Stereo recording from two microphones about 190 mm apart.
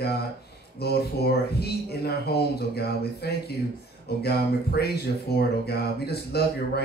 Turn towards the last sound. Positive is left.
turn(degrees=55)  # may be behind; listen again after turning